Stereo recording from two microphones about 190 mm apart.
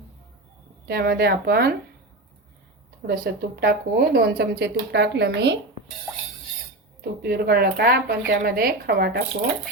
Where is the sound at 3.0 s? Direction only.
55° right (ahead or behind).